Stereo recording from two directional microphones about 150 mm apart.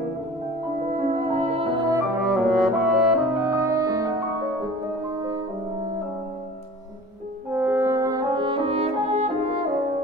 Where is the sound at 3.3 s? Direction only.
20° right (ahead or behind).